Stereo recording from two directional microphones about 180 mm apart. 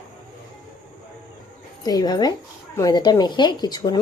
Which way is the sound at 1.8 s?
20° left (ahead or behind).